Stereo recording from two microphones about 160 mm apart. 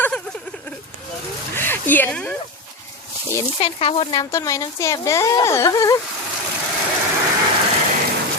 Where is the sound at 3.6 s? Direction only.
35° left (ahead or behind).